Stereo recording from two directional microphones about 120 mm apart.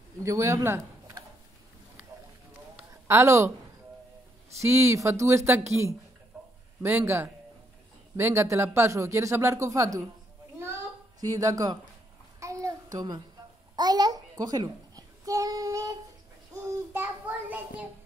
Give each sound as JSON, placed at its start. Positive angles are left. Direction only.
{"t": 0.2, "sound": "speech", "side_deg": -25}
{"t": 2.9, "sound": "a man's voice", "side_deg": -20}
{"t": 11.1, "sound": "speech", "side_deg": -30}
{"t": 12.4, "sound": "a sound", "side_deg": -25}
{"t": 16.9, "sound": "child singing", "side_deg": -15}